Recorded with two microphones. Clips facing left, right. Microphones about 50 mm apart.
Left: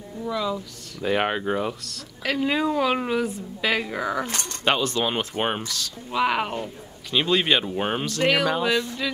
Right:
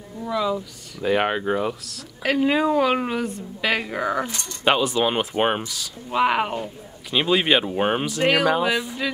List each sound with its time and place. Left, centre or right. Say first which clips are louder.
0.2 s speech: right 3 dB; centre
2.2 s speech: right 4 dB; centre
4.3 s speech: left 2 dB; left
4.6 s speech: right 3 dB; centre